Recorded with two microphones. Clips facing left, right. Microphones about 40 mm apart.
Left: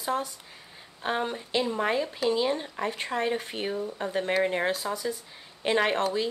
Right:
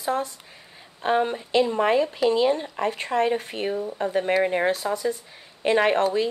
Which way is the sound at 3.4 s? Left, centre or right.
Centre.